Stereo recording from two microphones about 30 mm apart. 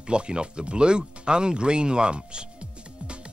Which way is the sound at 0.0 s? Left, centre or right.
Right.